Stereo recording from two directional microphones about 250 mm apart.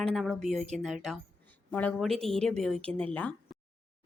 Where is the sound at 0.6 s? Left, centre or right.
Right.